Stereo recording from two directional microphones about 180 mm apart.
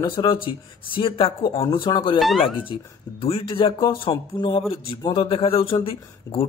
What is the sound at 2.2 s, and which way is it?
Speech, centre (ahead or behind).